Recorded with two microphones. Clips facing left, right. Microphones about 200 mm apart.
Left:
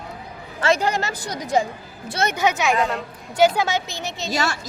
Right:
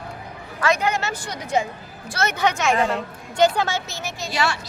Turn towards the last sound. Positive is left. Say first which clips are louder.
# even
turn(degrees=40)  # may be behind; listen again after turning